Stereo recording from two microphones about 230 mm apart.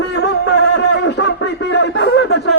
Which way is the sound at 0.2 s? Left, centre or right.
Left.